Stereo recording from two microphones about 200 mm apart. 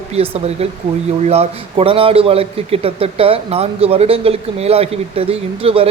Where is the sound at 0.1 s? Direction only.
30° right (ahead or behind).